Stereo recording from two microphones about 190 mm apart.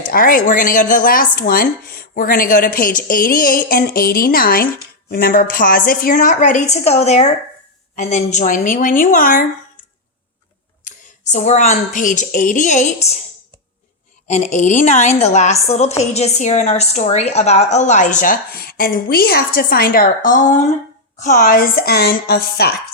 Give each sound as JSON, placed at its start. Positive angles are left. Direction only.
{"t": 0.1, "sound": "speech", "side_deg": 45}
{"t": 10.8, "sound": "a woman's voice", "side_deg": 40}
{"t": 14.3, "sound": "a woman's voice", "side_deg": 40}